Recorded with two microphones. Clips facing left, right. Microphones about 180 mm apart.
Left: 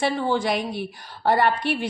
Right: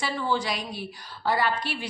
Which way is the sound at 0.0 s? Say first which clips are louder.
Left 5 dB; 55° left (ahead or behind).